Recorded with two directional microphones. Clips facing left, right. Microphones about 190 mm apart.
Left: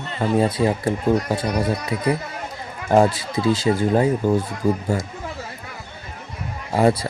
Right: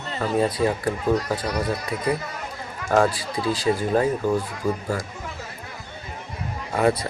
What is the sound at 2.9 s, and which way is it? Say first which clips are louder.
Speech: left 4 dB; 25° left (ahead or behind).